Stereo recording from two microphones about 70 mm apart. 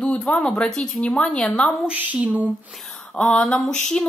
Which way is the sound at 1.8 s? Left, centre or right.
Right.